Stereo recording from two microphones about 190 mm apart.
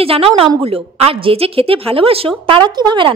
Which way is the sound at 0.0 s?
30° right (ahead or behind).